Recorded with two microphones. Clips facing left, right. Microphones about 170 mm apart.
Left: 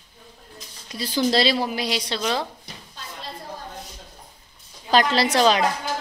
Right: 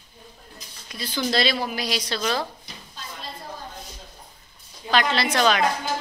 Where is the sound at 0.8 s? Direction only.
35° left (ahead or behind).